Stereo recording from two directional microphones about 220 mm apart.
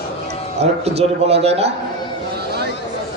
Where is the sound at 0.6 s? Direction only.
30° right (ahead or behind).